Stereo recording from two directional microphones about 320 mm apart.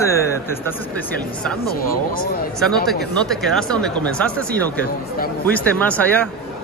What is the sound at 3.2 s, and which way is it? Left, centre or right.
Speech, centre.